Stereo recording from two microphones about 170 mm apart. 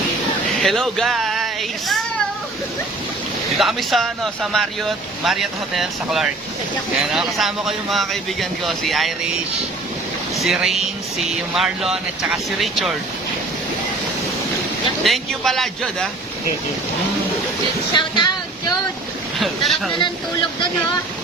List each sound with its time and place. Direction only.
0.6 s speech: centre (ahead or behind)
3.6 s speech: centre (ahead or behind)
15.0 s speech: centre (ahead or behind)
17.9 s speech: 25° left (ahead or behind)
19.4 s speech: centre (ahead or behind)